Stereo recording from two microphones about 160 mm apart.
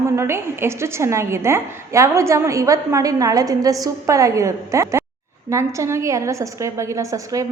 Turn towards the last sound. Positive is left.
turn(degrees=-20)  # may be behind; listen again after turning